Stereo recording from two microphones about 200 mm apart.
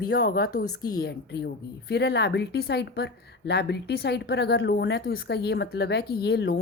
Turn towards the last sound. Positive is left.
turn(degrees=55)  # may be behind; listen again after turning